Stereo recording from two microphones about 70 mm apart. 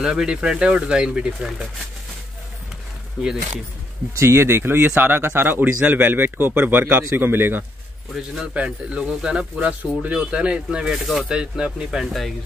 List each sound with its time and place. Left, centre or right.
0.0 s speech: centre
4.2 s speech: right
8.5 s speech: centre